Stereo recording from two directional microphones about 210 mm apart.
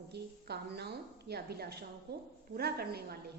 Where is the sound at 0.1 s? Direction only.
50° right (ahead or behind).